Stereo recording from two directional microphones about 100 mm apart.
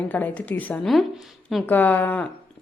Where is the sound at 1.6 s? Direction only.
15° left (ahead or behind).